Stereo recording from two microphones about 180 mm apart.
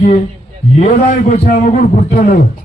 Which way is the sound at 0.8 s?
55° left (ahead or behind).